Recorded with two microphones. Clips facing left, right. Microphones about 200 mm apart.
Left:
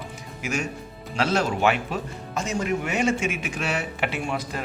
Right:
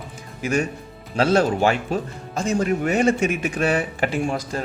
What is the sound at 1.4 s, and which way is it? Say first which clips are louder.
A man's voice: right 3 dB; 35° right (ahead or behind).